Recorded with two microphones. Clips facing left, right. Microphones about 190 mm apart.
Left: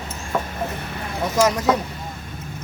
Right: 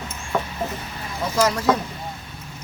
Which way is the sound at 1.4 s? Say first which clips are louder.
Left 1 dB; 20° left (ahead or behind).